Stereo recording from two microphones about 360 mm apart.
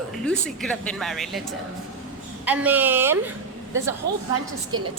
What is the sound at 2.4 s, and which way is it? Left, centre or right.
Speech, centre.